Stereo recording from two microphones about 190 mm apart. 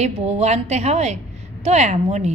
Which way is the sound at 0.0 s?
35° right (ahead or behind).